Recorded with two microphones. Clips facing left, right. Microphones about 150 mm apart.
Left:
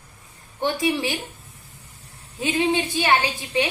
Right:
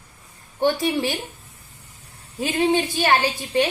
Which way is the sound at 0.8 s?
40° right (ahead or behind).